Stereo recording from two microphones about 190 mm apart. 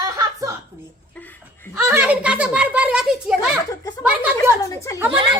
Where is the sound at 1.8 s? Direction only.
10° right (ahead or behind).